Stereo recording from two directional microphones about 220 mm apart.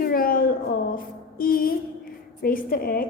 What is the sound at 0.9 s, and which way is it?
Music, 40° left (ahead or behind).